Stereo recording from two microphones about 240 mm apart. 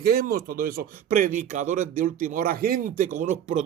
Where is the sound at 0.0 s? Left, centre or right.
Right.